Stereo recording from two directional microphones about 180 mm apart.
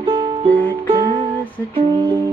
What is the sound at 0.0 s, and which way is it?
Music, 30° right (ahead or behind).